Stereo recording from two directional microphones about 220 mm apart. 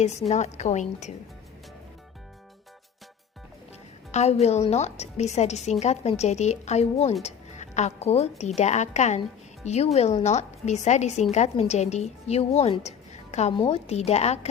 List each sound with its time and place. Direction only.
0.3 s speech: 30° left (ahead or behind)
4.1 s a woman's voice: 30° left (ahead or behind)